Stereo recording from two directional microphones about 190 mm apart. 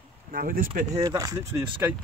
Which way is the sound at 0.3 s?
50° right (ahead or behind).